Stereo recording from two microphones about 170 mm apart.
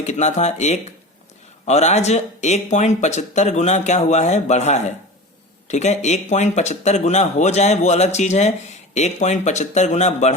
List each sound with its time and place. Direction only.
0.0 s speech: 40° left (ahead or behind)